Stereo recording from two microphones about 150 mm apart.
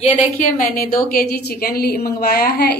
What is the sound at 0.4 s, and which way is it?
A woman's voice, 70° left (ahead or behind).